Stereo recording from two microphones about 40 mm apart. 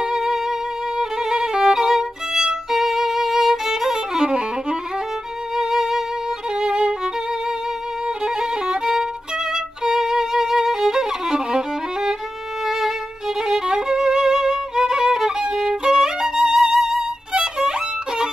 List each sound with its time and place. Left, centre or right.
0.0 s violin: centre
4.3 s music: right
5.6 s music: centre
6.6 s violin: right
8.2 s violin: centre
17.3 s violin: centre